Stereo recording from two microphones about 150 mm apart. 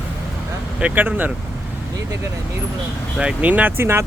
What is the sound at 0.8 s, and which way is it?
Speech, 10° right (ahead or behind).